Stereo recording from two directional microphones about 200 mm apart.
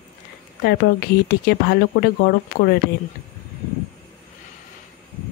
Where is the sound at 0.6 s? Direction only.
55° left (ahead or behind).